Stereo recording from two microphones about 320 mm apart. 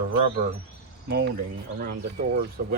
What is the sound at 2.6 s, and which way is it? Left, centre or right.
Speech, right.